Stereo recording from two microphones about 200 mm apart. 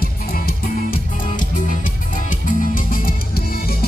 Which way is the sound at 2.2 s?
45° left (ahead or behind).